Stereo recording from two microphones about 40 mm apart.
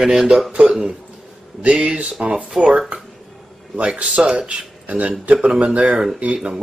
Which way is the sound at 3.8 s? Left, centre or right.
Right.